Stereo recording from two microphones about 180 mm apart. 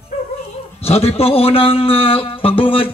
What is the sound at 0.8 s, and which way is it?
A man's voice, 35° left (ahead or behind).